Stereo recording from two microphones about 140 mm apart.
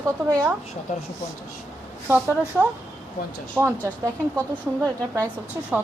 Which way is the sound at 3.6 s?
20° right (ahead or behind).